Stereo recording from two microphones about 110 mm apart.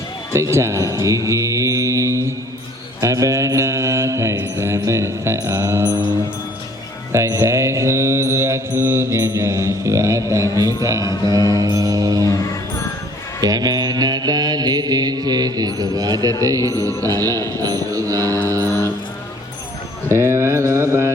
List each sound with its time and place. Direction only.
0.3 s speech: 25° right (ahead or behind)
3.0 s mantra: 30° right (ahead or behind)
7.1 s mantra: 25° right (ahead or behind)
11.0 s mantra: 40° left (ahead or behind)
11.3 s mantra: 35° right (ahead or behind)
13.4 s mantra: 35° right (ahead or behind)
18.4 s music: 30° right (ahead or behind)
20.1 s mantra: 25° right (ahead or behind)